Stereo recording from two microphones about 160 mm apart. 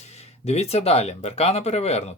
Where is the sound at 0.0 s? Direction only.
45° left (ahead or behind).